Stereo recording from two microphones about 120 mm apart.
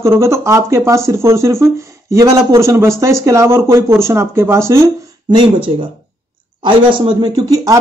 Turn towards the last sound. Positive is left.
turn(degrees=-30)  # may be behind; listen again after turning